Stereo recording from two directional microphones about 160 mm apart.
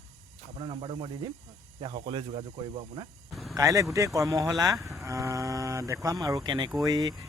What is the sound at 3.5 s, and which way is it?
Speech, 20° right (ahead or behind).